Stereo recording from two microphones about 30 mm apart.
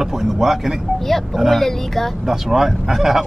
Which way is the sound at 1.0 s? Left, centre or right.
Centre.